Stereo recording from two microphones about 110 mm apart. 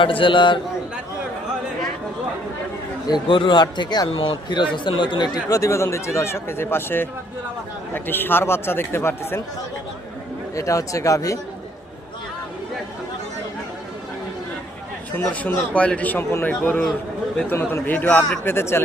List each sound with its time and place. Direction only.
0.0 s a man's voice: 50° left (ahead or behind)
3.1 s a man's voice: 50° left (ahead or behind); by 9.4 s 25° left (ahead or behind)
10.5 s speech: 30° left (ahead or behind)
15.3 s a man's voice: 10° left (ahead or behind)